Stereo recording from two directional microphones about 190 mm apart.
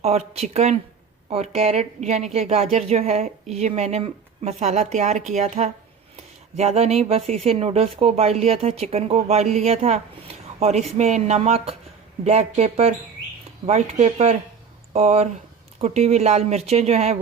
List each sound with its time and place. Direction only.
0.0 s speech: 35° right (ahead or behind)